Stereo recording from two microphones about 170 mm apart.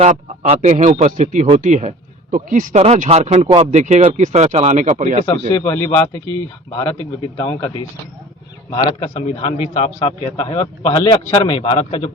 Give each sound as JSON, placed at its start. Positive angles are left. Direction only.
{"t": 0.0, "sound": "speech", "side_deg": -40}
{"t": 2.8, "sound": "speech", "side_deg": -40}
{"t": 5.6, "sound": "speech", "side_deg": 15}
{"t": 6.7, "sound": "speech", "side_deg": 30}
{"t": 7.3, "sound": "speech", "side_deg": 15}
{"t": 8.8, "sound": "a man's voice", "side_deg": 35}